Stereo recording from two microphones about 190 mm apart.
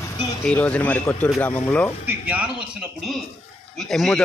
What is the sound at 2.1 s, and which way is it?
A man's voice, 5° right (ahead or behind).